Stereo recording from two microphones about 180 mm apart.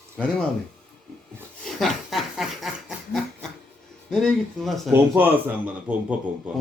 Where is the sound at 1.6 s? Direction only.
Centre (ahead or behind).